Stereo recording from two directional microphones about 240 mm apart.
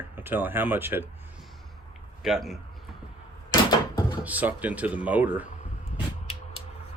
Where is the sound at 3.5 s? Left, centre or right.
Left.